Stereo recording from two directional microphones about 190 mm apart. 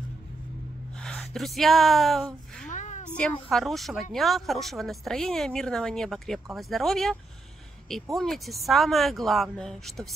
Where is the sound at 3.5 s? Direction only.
Centre (ahead or behind).